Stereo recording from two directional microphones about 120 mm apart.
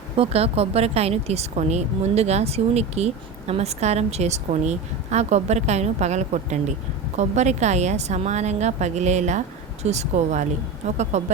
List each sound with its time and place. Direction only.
0.2 s a woman's voice: 55° right (ahead or behind)